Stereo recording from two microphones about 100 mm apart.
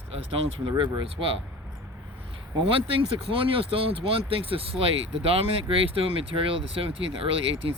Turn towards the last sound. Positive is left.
turn(degrees=-65)  # may be behind; listen again after turning